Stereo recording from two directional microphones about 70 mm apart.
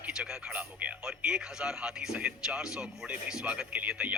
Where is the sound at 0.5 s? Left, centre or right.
Centre.